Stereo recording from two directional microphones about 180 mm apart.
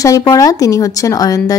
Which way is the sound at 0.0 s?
20° left (ahead or behind).